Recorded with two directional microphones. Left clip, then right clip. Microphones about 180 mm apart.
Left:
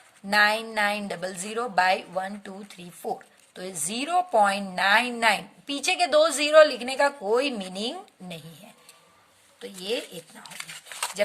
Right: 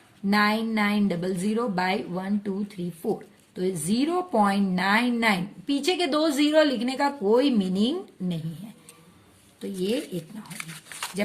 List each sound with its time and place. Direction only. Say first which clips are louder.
0.3 s a woman's voice: left 2 dB; 40° left (ahead or behind)